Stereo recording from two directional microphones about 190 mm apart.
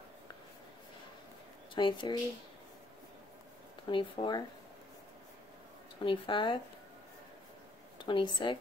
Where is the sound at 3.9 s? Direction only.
25° left (ahead or behind).